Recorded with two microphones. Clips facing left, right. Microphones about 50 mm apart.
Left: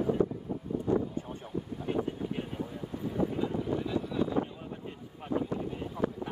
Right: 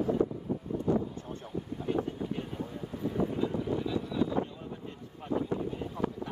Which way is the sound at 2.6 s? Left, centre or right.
Centre.